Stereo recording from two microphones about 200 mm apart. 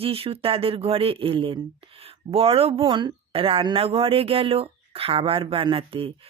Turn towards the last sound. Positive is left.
turn(degrees=-25)  # may be behind; listen again after turning